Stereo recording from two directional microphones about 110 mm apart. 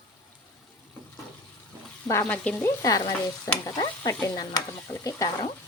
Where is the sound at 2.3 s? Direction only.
10° left (ahead or behind).